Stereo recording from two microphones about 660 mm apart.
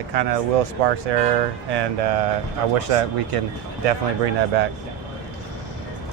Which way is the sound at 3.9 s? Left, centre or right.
Right.